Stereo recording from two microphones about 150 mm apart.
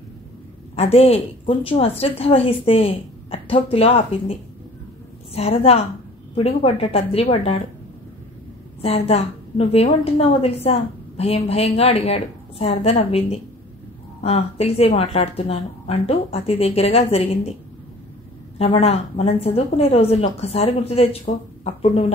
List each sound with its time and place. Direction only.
0.7 s a woman's voice: 40° left (ahead or behind)
8.8 s a woman's voice: 45° left (ahead or behind)
18.6 s a woman's voice: 40° left (ahead or behind)